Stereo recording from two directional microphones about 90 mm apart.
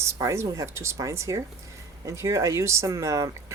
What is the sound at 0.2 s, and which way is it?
Speech, 40° right (ahead or behind).